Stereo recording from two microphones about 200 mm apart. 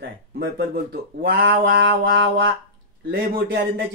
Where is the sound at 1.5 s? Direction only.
50° right (ahead or behind); by 2.4 s 70° right (ahead or behind).